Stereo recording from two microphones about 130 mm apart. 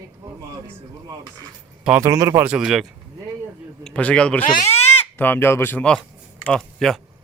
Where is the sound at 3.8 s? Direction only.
5° left (ahead or behind).